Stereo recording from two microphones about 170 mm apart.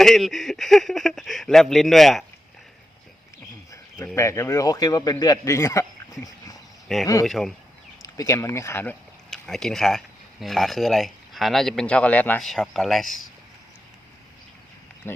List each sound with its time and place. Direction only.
0.0 s speech: centre (ahead or behind)
3.7 s a man's voice: 15° left (ahead or behind)
7.3 s speech: centre (ahead or behind)
8.0 s speech: 20° left (ahead or behind); by 13.1 s centre (ahead or behind)
15.1 s speech: 15° left (ahead or behind)